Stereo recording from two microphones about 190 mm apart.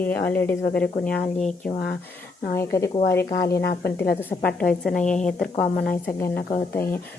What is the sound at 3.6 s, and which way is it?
Speech, 55° left (ahead or behind).